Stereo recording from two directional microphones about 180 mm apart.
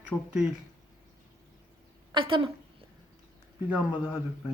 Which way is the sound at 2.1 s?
30° right (ahead or behind).